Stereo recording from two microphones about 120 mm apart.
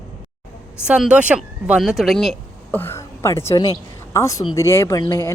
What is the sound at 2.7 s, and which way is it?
A woman's voice, 20° left (ahead or behind).